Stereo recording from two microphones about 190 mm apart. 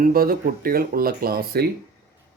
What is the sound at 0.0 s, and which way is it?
Speech, 50° right (ahead or behind).